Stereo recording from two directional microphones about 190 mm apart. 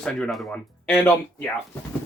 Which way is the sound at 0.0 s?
5° left (ahead or behind).